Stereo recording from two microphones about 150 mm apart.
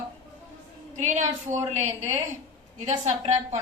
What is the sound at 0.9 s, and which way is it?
A woman's voice, 55° right (ahead or behind).